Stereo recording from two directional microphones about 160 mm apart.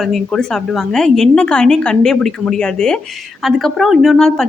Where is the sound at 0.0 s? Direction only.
Centre (ahead or behind).